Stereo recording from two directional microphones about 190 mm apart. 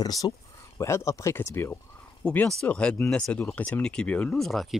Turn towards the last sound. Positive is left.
turn(degrees=0)  # may be behind; listen again after turning